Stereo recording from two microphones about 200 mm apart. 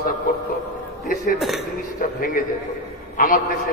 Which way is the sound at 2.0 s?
45° left (ahead or behind).